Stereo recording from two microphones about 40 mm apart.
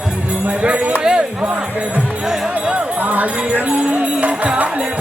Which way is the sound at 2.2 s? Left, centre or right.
Centre.